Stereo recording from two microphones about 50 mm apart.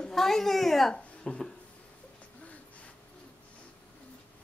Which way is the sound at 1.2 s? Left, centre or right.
Centre.